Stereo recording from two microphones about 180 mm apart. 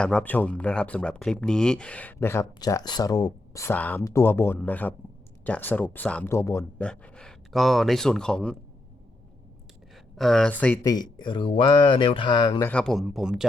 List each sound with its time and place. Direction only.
0.0 s speech: 5° left (ahead or behind)
9.9 s speech: centre (ahead or behind)
10.8 s speech: 25° left (ahead or behind)
12.5 s speech: 10° left (ahead or behind)